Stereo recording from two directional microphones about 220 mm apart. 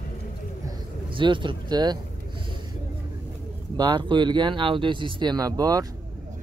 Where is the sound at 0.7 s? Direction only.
20° right (ahead or behind).